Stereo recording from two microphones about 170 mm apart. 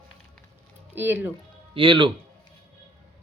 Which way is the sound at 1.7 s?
30° right (ahead or behind).